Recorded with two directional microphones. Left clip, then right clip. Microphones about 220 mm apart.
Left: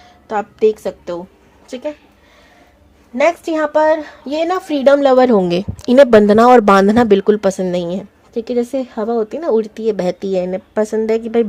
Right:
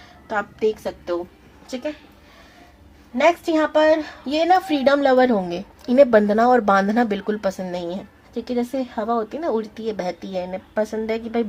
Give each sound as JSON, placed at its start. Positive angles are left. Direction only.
{"t": 0.3, "sound": "a woman's voice", "side_deg": 50}
{"t": 3.2, "sound": "a woman's voice", "side_deg": 40}